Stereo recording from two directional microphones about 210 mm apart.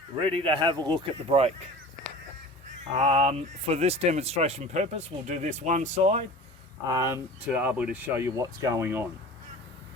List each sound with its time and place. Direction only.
0.2 s speech: 25° right (ahead or behind)
3.0 s speech: 25° right (ahead or behind)
6.8 s speech: 15° right (ahead or behind)